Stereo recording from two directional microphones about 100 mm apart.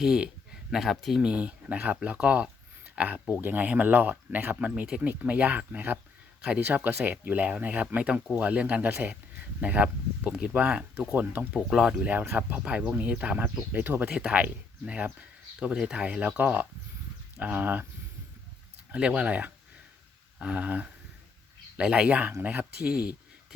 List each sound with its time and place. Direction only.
0.0 s speech: 5° right (ahead or behind)
11.7 s speech: 5° right (ahead or behind); by 14.1 s 20° right (ahead or behind)
14.1 s speech: 10° right (ahead or behind)
18.9 s speech: 10° right (ahead or behind)